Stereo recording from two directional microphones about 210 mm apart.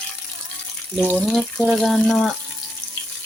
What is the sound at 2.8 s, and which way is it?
Water tap, 5° left (ahead or behind).